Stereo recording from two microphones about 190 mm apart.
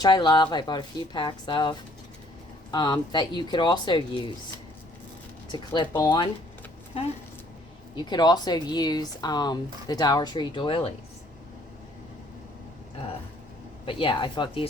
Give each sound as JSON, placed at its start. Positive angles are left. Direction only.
{"t": 0.0, "sound": "speech", "side_deg": 20}
{"t": 2.7, "sound": "speech", "side_deg": 20}
{"t": 5.5, "sound": "speech", "side_deg": 25}
{"t": 13.8, "sound": "speech", "side_deg": 25}